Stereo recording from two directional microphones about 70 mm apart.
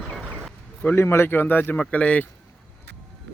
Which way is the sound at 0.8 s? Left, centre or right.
Left.